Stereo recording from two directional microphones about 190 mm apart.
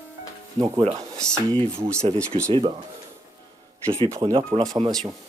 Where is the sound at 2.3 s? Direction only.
30° right (ahead or behind).